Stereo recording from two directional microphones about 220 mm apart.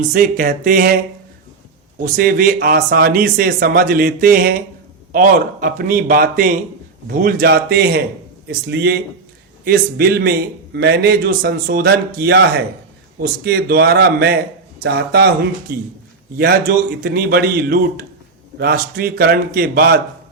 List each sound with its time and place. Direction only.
0.0 s speech: 40° right (ahead or behind)
2.0 s a man's voice: 40° right (ahead or behind)
16.4 s a man's voice: 40° right (ahead or behind)